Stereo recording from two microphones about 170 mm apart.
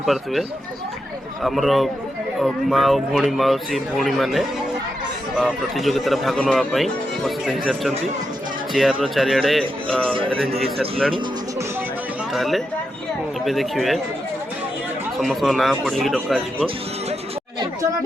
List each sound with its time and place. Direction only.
0.0 s speech: centre (ahead or behind)
10.3 s speech: 35° right (ahead or behind)
12.3 s speech: centre (ahead or behind)
15.2 s speech: centre (ahead or behind)